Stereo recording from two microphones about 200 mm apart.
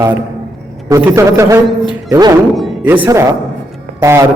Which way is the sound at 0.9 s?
15° right (ahead or behind).